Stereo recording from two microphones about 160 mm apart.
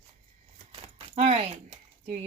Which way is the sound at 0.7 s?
35° right (ahead or behind).